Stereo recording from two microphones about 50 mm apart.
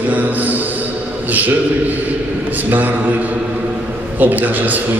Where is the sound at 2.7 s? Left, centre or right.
Right.